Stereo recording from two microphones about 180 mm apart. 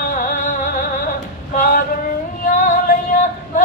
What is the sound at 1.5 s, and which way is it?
Male singing, 55° left (ahead or behind).